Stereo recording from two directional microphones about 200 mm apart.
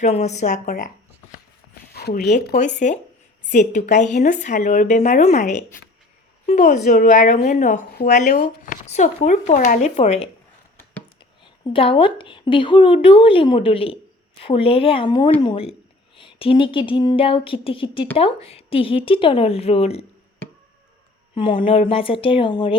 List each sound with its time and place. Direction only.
0.0 s speech: 35° left (ahead or behind)
2.0 s speech: 55° left (ahead or behind)
2.6 s speech: 35° left (ahead or behind)
21.3 s speech: 25° left (ahead or behind)